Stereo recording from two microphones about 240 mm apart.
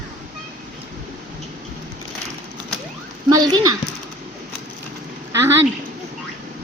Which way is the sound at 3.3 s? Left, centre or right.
Centre.